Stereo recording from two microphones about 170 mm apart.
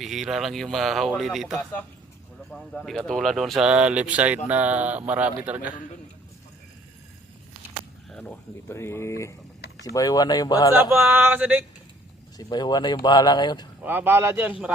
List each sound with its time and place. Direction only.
0.0 s speech: centre (ahead or behind)
8.1 s speech: 5° left (ahead or behind)
10.8 s speech: 15° right (ahead or behind)
12.4 s speech: 25° left (ahead or behind)
13.8 s speech: 10° right (ahead or behind)